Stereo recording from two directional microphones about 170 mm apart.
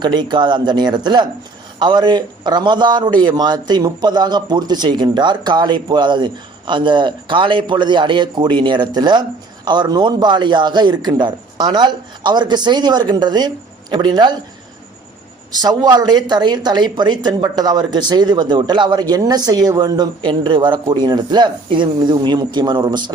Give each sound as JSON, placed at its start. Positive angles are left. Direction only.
{"t": 0.0, "sound": "speech", "side_deg": -25}
{"t": 15.6, "sound": "speech", "side_deg": -25}